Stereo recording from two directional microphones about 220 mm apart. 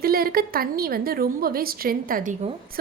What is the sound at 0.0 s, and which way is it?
A woman's voice, 40° right (ahead or behind).